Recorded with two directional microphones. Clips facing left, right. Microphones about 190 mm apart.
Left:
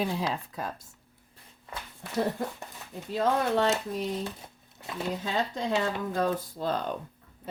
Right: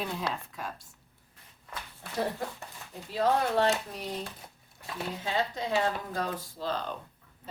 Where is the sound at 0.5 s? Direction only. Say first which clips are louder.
Left 4 dB; 35° left (ahead or behind).